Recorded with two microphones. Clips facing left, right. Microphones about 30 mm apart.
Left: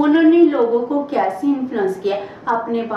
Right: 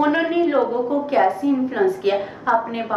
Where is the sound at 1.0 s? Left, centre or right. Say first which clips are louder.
Even; centre.